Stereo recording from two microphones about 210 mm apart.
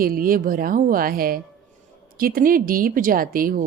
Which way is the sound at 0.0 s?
45° right (ahead or behind).